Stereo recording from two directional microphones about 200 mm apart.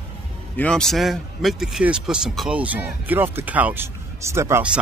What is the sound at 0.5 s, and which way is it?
A man's voice, 5° left (ahead or behind).